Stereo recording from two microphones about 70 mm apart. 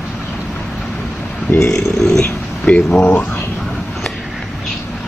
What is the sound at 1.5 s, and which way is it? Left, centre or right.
Speech, left.